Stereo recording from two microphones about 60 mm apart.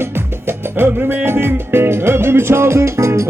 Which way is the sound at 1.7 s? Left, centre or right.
Right.